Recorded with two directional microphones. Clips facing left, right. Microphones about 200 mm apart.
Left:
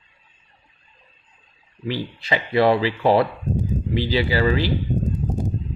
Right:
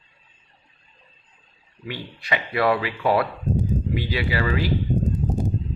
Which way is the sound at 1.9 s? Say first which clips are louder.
Left 4 dB; 30° left (ahead or behind).